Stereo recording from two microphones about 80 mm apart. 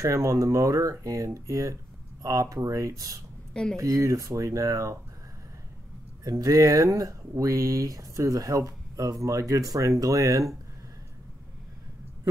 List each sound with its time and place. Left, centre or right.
0.0 s speech: right
6.2 s speech: right